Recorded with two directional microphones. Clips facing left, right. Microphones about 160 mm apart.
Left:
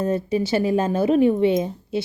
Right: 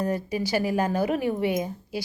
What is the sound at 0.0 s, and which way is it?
Speech, 25° left (ahead or behind).